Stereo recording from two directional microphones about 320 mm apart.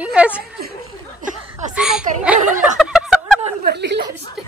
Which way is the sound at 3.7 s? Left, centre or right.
Right.